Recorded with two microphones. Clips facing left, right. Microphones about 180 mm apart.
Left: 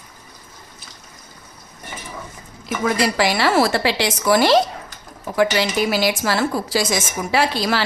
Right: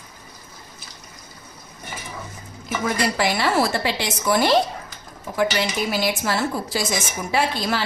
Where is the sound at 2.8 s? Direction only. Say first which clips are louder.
Left 3 dB; 90° left.